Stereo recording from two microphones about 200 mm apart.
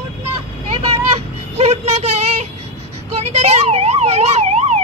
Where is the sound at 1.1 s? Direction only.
30° right (ahead or behind).